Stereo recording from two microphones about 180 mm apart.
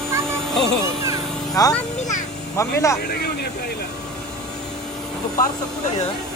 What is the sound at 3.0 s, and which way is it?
Vehicle, 65° left (ahead or behind).